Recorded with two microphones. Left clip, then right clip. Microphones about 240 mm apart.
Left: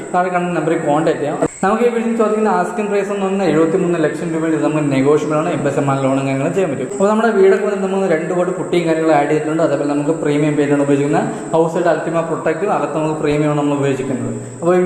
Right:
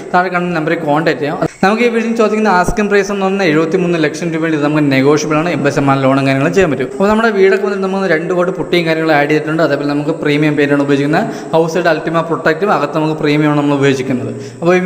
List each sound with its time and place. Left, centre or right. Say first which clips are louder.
0.1 s a man's voice: right 3 dB; right